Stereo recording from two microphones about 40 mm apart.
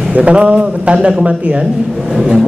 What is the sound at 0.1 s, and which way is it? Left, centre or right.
A man's voice, right.